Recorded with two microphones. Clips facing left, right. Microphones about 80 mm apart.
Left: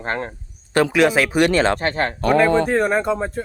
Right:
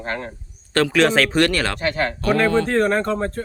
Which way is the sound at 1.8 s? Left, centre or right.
Left.